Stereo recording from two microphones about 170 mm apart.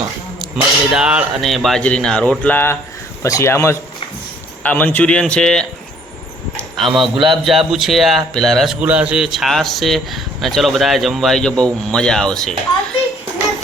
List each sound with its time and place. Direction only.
0.5 s a man's voice: 5° right (ahead or behind)
6.6 s a sound: centre (ahead or behind)
7.0 s speech: centre (ahead or behind)